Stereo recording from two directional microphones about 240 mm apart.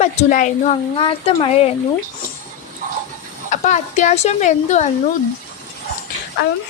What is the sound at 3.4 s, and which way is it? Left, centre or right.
Speech, left.